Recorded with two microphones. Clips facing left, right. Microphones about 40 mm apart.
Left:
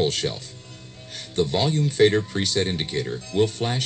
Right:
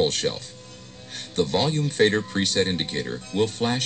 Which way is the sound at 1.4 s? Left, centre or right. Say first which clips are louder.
Left 1 dB; right.